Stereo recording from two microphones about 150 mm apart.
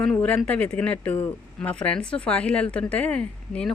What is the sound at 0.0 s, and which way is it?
A woman's voice, 5° left (ahead or behind).